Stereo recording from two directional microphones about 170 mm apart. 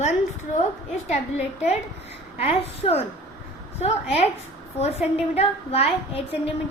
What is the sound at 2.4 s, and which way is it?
A woman's voice, 35° left (ahead or behind).